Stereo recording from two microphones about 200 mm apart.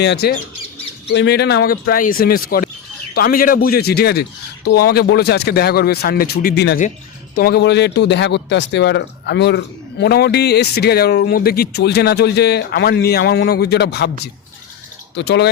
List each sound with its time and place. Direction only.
0.0 s a man's voice: 55° left (ahead or behind)
15.1 s speech: 60° left (ahead or behind)